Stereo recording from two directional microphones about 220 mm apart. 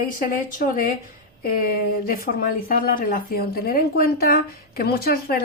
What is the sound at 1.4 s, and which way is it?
Speech, 40° left (ahead or behind).